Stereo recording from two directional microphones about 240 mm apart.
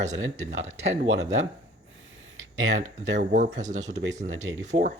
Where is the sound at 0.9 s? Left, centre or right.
Right.